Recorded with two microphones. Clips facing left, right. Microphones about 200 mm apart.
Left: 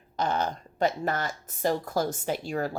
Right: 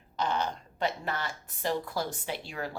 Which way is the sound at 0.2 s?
45° left (ahead or behind).